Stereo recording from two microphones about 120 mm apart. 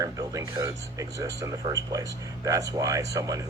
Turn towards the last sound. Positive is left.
turn(degrees=-30)  # may be behind; listen again after turning